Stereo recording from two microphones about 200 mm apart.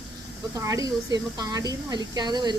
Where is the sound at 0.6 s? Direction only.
15° right (ahead or behind).